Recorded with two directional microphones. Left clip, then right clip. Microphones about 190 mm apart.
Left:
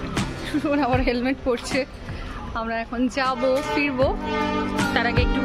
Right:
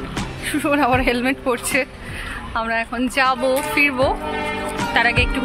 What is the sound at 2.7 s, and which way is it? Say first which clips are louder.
Speech: right 5 dB; centre (ahead or behind).